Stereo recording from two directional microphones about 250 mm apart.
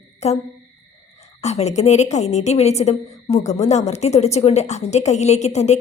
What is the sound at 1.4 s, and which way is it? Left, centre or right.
A woman's voice, left.